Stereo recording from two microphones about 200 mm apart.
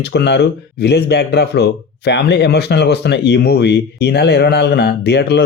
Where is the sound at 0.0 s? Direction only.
55° left (ahead or behind).